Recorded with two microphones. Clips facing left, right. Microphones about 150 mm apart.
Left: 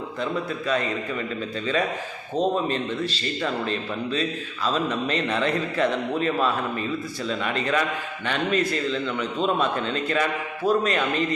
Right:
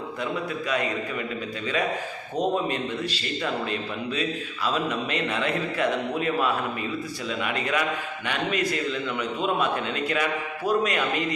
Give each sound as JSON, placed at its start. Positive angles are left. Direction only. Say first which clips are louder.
{"t": 2.3, "sound": "speech", "louder": "left 2 dB", "side_deg": -10}